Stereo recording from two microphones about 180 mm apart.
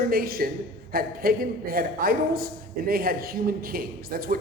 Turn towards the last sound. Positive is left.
turn(degrees=-55)  # may be behind; listen again after turning